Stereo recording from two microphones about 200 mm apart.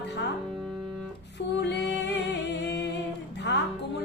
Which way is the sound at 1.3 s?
60° left (ahead or behind).